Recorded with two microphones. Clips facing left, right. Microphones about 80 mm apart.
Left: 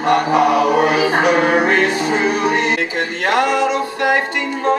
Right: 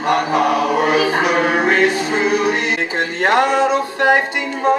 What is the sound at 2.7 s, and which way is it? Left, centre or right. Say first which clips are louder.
Music: even; right.